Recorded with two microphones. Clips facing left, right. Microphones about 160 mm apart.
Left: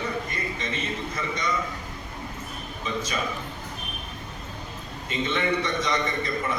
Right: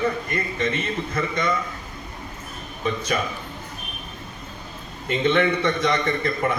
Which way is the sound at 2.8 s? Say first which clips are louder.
Right 6 dB; 60° right (ahead or behind).